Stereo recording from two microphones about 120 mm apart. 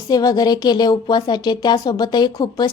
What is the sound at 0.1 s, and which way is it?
A woman's voice, 35° left (ahead or behind).